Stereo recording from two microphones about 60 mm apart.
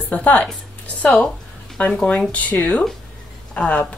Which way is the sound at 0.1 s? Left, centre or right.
Left.